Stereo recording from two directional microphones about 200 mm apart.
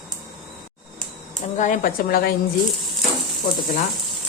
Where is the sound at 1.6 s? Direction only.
40° left (ahead or behind).